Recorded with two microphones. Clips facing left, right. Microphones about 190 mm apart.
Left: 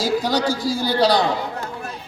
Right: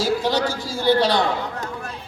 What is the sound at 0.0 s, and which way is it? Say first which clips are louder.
A man's voice: left 1 dB; 40° left (ahead or behind).